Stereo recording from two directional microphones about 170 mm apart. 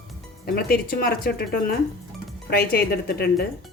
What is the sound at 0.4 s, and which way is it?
Speech, 60° left (ahead or behind).